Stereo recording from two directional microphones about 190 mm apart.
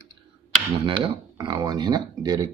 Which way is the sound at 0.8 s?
25° right (ahead or behind).